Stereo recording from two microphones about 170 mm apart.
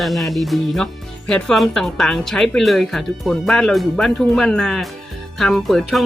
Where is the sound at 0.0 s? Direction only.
Centre (ahead or behind).